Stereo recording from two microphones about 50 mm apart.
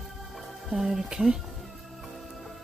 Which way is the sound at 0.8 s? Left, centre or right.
Centre.